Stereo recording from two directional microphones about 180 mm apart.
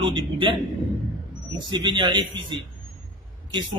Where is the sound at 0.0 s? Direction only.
25° right (ahead or behind).